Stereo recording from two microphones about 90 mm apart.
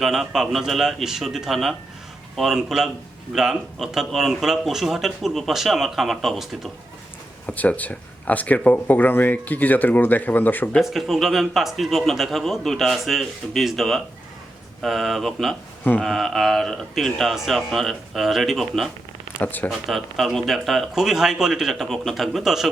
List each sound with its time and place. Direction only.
0.0 s speech: 5° right (ahead or behind)
7.4 s speech: 15° left (ahead or behind)
10.8 s speech: centre (ahead or behind)
15.8 s speech: 15° left (ahead or behind)
16.0 s speech: 5° left (ahead or behind)
19.4 s speech: 20° left (ahead or behind)
19.7 s speech: centre (ahead or behind)